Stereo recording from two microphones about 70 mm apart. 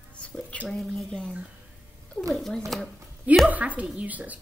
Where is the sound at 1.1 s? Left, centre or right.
Centre.